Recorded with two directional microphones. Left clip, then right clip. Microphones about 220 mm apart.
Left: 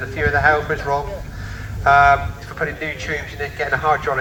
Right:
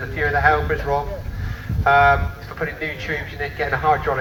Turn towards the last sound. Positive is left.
turn(degrees=15)  # may be behind; listen again after turning